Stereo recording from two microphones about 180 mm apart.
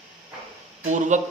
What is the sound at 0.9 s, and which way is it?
Speech, 45° right (ahead or behind).